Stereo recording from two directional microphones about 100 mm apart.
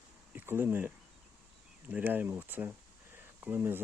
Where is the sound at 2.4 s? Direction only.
20° right (ahead or behind).